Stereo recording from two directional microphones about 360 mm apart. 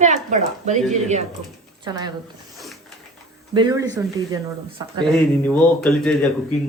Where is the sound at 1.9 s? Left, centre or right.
Centre.